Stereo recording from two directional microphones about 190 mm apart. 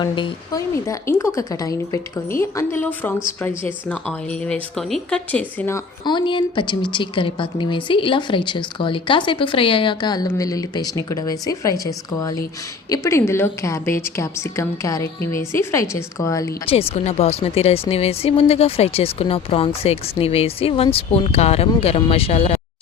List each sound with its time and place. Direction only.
0.0 s a woman's voice: 20° left (ahead or behind)
6.1 s a woman's voice: 25° left (ahead or behind)
16.6 s speech: 30° left (ahead or behind)